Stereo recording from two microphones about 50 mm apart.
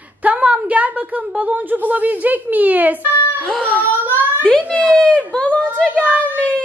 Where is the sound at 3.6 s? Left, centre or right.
Left.